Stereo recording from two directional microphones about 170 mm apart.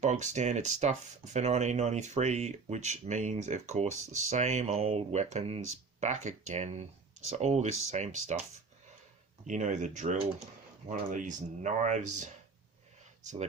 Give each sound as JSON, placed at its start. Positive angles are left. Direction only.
{"t": 0.0, "sound": "speech", "side_deg": -45}
{"t": 9.5, "sound": "speech", "side_deg": -45}